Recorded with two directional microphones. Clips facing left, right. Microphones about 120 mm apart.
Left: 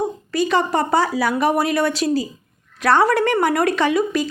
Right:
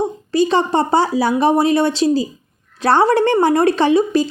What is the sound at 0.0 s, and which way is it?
A woman's voice, 30° right (ahead or behind).